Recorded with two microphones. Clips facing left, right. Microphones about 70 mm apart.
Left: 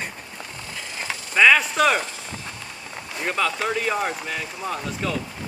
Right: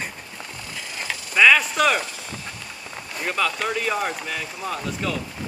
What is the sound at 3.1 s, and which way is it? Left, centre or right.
Speech, centre.